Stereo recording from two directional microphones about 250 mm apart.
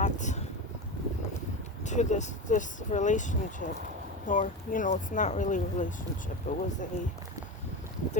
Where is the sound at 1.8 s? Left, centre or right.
Left.